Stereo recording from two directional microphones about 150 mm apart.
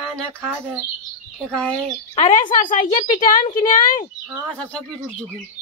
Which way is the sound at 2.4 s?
60° left (ahead or behind).